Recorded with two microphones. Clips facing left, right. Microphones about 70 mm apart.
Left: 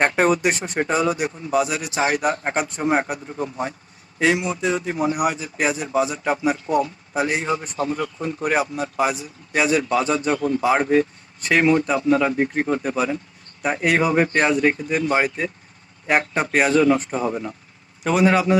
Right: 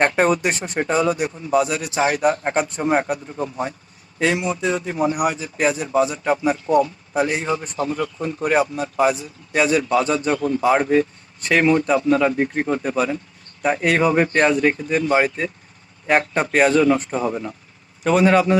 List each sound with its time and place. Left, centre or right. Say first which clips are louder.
0.0 s a man's voice: right 1 dB; centre
7.8 s speech: right 1 dB; left
8.2 s speech: right 3 dB; centre
10.3 s speech: even; left
10.6 s a man's voice: right 2 dB; centre